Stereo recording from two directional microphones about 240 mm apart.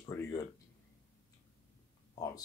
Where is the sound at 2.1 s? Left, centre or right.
Centre.